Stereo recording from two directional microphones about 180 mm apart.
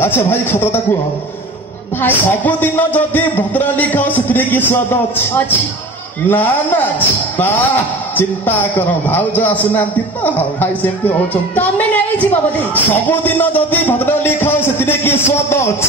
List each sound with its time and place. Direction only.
0.0 s a man's voice: 10° left (ahead or behind)
2.0 s a man's voice: 10° left (ahead or behind)